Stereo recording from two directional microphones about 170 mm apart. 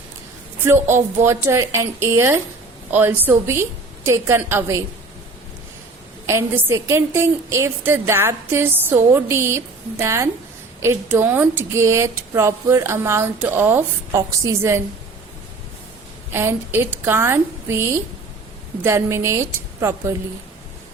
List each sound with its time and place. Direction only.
0.9 s speech: 15° right (ahead or behind)
6.2 s speech: 15° right (ahead or behind)
16.3 s speech: 15° right (ahead or behind)